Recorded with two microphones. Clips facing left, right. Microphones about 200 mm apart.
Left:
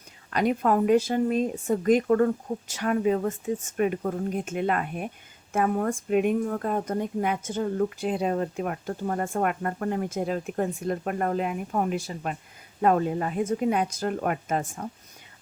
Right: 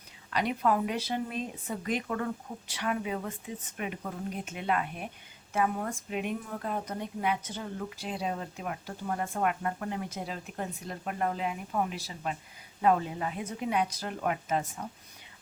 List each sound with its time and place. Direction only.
0.3 s speech: 45° left (ahead or behind)